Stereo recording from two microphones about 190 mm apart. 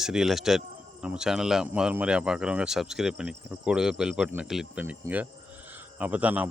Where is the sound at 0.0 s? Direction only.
5° right (ahead or behind).